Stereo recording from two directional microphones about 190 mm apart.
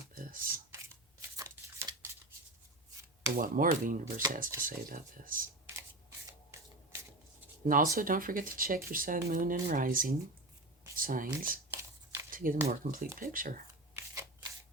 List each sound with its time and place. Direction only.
0.1 s a sound: 50° right (ahead or behind)
1.4 s tearing: 15° right (ahead or behind)
3.3 s speech: 45° right (ahead or behind)
5.6 s shuffling cards: 15° right (ahead or behind)
7.6 s speech: 45° right (ahead or behind)
11.7 s a sound: 15° right (ahead or behind)
12.3 s a sound: 45° right (ahead or behind)
12.6 s speech: 50° right (ahead or behind)
13.9 s shuffling cards: 15° right (ahead or behind)